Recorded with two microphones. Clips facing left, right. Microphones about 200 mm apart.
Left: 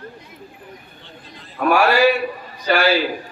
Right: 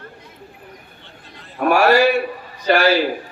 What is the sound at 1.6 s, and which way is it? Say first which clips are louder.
Speech: right 2 dB; 40° right (ahead or behind).